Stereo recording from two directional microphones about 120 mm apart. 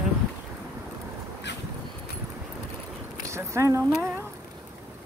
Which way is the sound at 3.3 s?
25° right (ahead or behind).